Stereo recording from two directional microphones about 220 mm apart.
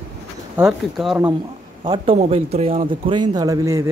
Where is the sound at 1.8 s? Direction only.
20° right (ahead or behind).